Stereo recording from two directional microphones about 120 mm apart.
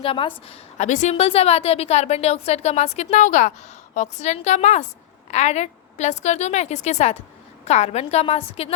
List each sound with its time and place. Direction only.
0.0 s a woman's voice: 45° left (ahead or behind)
0.8 s a woman's voice: 85° left
3.9 s a woman's voice: 75° left (ahead or behind); by 8.7 s 55° left (ahead or behind)